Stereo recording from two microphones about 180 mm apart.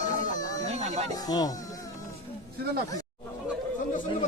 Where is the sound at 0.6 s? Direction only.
35° right (ahead or behind).